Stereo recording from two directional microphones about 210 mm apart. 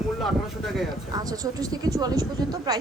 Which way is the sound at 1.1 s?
20° right (ahead or behind).